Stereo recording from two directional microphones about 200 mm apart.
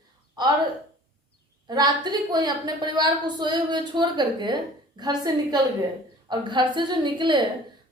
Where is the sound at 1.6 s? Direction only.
20° right (ahead or behind).